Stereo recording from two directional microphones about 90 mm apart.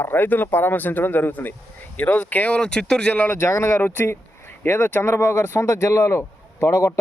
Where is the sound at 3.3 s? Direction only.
30° left (ahead or behind).